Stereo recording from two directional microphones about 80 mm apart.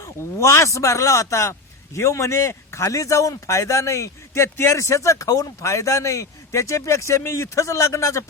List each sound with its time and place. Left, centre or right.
0.0 s a man's voice: left